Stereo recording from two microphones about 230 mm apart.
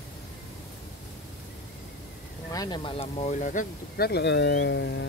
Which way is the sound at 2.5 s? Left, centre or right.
Centre.